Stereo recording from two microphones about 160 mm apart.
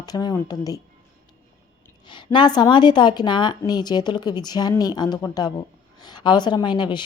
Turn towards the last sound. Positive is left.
turn(degrees=30)  # may be behind; listen again after turning